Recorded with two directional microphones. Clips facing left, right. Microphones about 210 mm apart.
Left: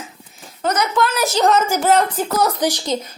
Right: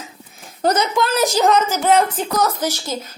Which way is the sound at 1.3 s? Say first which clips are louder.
Left 1 dB; centre (ahead or behind).